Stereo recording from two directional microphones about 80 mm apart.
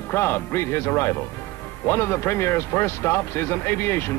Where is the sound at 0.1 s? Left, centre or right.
Left.